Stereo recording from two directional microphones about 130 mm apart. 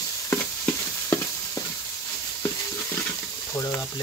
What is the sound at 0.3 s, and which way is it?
Frying, 15° left (ahead or behind).